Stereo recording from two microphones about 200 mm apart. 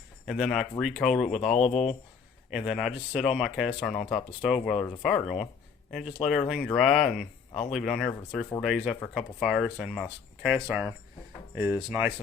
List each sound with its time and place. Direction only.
0.3 s speech: centre (ahead or behind)
1.4 s speech: 35° left (ahead or behind)
2.5 s speech: centre (ahead or behind)